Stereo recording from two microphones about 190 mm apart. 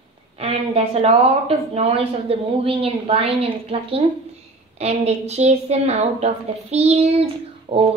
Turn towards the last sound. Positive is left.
turn(degrees=-30)  # may be behind; listen again after turning